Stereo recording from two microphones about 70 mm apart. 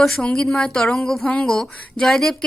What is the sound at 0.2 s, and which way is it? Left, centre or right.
Speech, centre.